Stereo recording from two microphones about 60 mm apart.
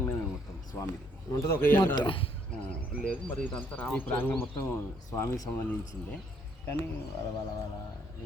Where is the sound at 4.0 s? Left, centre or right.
Left.